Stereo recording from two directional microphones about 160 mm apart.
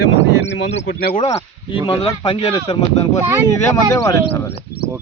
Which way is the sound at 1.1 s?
40° left (ahead or behind).